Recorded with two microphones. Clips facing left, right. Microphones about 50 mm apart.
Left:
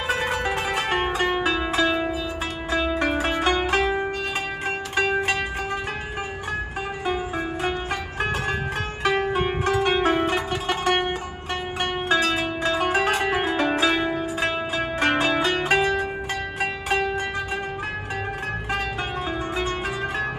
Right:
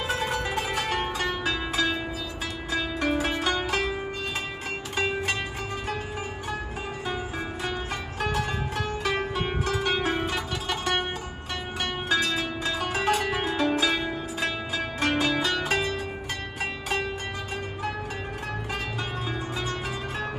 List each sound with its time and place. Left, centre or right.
0.1 s zither: left
2.7 s music: left
8.2 s music: left
9.2 s zither: left
11.8 s music: left